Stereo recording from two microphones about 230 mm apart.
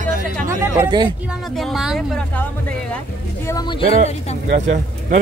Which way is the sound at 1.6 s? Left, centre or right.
Centre.